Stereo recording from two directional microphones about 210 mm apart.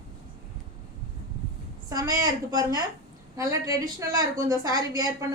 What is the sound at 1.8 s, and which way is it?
A woman's voice, 15° right (ahead or behind).